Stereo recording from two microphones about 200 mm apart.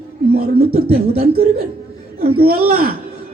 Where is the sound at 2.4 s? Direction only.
50° right (ahead or behind).